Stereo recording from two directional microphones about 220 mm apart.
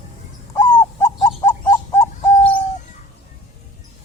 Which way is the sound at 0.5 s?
10° left (ahead or behind).